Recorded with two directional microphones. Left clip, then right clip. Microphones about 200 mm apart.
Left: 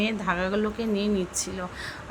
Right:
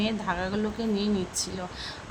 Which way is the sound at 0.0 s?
10° left (ahead or behind).